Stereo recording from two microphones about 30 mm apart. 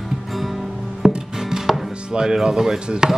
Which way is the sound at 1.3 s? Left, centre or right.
Centre.